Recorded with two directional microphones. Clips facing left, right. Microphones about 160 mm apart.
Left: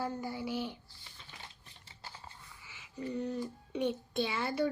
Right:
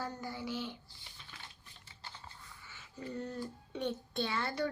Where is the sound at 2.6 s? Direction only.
Centre (ahead or behind).